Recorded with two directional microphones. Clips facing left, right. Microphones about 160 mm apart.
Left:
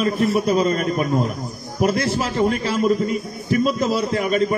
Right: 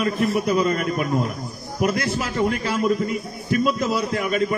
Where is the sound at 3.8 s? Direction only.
30° left (ahead or behind).